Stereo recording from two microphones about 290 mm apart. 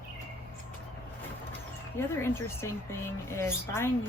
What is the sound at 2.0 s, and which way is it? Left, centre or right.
Speech, centre.